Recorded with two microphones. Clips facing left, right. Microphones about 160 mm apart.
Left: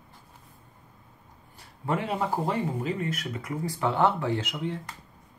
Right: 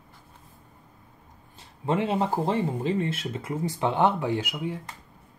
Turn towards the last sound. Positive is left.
turn(degrees=-10)  # may be behind; listen again after turning